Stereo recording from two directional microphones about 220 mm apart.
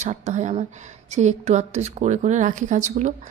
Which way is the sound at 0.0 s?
30° right (ahead or behind).